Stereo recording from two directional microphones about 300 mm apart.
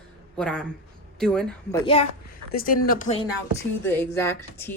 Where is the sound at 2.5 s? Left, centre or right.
Left.